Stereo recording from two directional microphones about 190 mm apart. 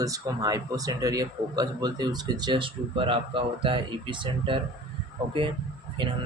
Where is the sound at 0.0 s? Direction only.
20° right (ahead or behind).